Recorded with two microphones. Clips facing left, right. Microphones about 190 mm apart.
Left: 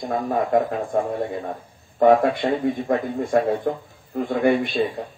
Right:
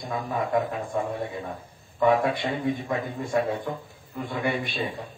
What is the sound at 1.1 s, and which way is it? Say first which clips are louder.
Speech: left 6 dB; 40° left (ahead or behind).